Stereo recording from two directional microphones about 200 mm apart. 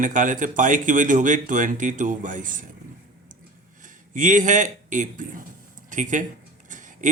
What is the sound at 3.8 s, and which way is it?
A man's voice, 40° right (ahead or behind).